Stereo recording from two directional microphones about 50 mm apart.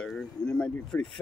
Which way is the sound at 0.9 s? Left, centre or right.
Left.